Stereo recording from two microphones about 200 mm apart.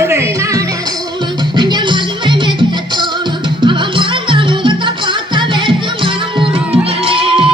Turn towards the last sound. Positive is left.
turn(degrees=-25)  # may be behind; listen again after turning